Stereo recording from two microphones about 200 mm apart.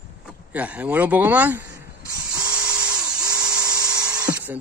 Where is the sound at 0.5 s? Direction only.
5° right (ahead or behind).